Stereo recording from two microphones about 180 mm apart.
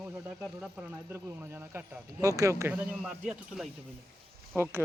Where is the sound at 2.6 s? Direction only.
10° right (ahead or behind).